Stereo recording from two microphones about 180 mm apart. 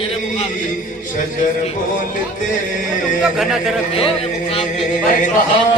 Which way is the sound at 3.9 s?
30° left (ahead or behind).